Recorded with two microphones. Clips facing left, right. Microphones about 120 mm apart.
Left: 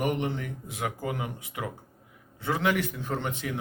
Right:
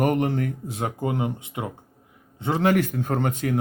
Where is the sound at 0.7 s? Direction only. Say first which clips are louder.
Right 5 dB; 30° right (ahead or behind).